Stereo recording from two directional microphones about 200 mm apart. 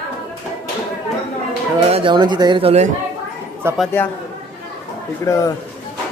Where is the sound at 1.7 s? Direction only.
25° right (ahead or behind).